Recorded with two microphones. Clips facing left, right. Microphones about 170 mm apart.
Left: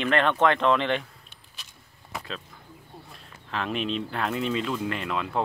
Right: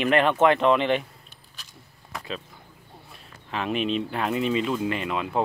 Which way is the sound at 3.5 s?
5° right (ahead or behind).